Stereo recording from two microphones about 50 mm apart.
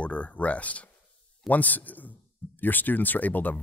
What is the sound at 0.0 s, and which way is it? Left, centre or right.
Speech, left.